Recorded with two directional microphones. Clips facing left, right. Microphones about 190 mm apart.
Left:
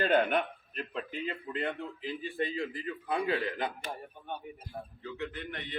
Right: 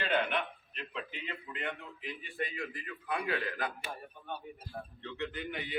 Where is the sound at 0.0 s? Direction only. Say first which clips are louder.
Left 5 dB; 45° left (ahead or behind).